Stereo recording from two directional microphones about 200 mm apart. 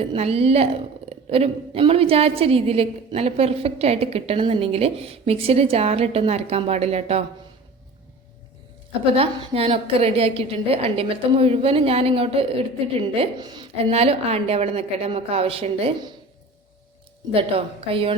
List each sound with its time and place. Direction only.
0.0 s a woman's voice: 30° right (ahead or behind)
8.9 s a woman's voice: 30° right (ahead or behind)
17.3 s a woman's voice: 30° right (ahead or behind)